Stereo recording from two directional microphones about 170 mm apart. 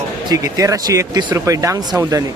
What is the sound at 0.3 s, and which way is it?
Speech, 20° right (ahead or behind).